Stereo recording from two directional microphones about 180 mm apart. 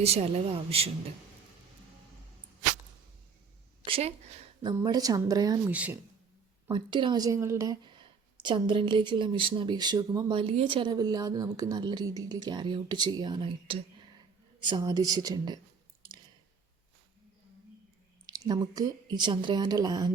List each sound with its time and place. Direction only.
0.0 s speech: 35° right (ahead or behind)
3.8 s speech: 30° right (ahead or behind)
4.6 s speech: 20° right (ahead or behind)
5.7 s speech: 5° right (ahead or behind)
6.7 s speech: 25° right (ahead or behind)
18.3 s speech: 20° right (ahead or behind)